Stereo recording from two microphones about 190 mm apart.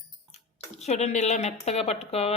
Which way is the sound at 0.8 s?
35° left (ahead or behind).